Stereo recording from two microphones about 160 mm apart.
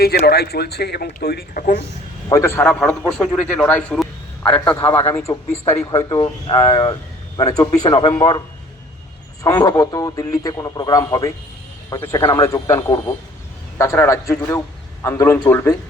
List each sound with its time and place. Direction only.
0.3 s speech: 80° left
2.3 s a man's voice: 15° left (ahead or behind)
4.8 s a man's voice: 35° left (ahead or behind)
5.0 s a man's voice: 15° left (ahead or behind)
8.2 s a man's voice: 40° left (ahead or behind)
9.4 s a man's voice: 20° left (ahead or behind)